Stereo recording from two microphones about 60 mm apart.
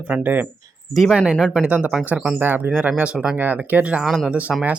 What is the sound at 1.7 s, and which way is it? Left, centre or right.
Speech, right.